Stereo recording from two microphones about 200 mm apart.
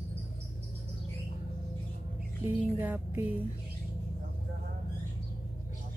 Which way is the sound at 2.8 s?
10° right (ahead or behind).